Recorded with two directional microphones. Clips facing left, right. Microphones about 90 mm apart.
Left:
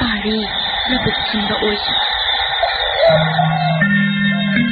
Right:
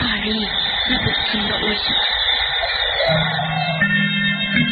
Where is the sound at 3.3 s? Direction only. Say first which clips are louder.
Left 7 dB; 40° left (ahead or behind).